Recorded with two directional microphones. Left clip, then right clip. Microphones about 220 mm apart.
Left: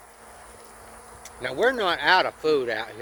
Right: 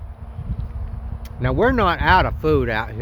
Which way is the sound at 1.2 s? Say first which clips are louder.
Right 4 dB; 45° right (ahead or behind).